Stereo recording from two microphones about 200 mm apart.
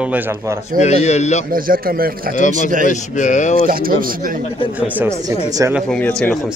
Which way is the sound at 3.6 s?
45° right (ahead or behind).